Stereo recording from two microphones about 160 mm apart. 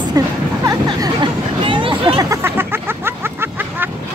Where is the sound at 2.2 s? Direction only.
15° right (ahead or behind).